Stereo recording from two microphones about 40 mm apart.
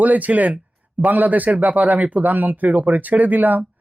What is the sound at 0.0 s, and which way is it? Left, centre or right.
Speech, right.